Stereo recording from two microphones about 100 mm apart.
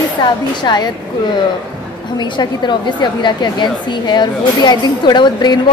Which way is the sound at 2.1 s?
50° left (ahead or behind).